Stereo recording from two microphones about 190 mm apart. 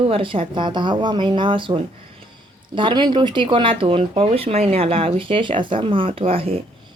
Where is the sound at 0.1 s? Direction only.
30° right (ahead or behind).